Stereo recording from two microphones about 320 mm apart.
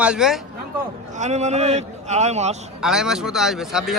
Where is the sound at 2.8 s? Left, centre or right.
Centre.